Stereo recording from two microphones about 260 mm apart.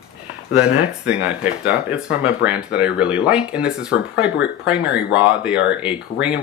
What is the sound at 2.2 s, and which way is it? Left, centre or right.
Speech, centre.